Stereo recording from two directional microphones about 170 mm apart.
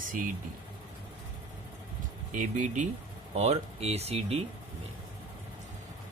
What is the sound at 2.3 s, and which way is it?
Speech, 45° right (ahead or behind).